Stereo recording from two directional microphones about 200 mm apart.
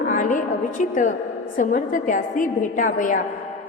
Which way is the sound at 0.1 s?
40° left (ahead or behind).